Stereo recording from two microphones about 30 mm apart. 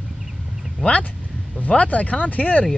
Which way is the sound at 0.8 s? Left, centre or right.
Left.